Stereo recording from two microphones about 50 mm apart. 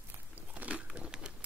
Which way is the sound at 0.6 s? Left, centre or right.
Right.